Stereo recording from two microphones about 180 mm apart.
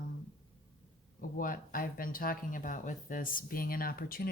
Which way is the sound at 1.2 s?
50° left (ahead or behind).